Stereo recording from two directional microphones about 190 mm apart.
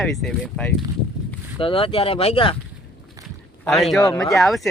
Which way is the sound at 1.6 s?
30° left (ahead or behind).